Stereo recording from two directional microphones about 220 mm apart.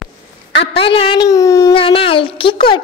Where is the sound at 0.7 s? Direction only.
25° left (ahead or behind).